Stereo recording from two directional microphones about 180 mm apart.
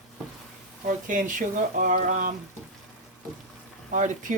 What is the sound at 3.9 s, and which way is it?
Speech, 45° right (ahead or behind).